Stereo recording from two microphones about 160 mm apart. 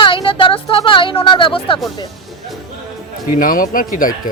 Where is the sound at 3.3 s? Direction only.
60° left (ahead or behind).